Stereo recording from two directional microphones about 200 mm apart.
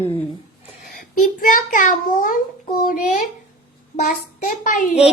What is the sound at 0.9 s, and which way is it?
A child's voice, 40° left (ahead or behind).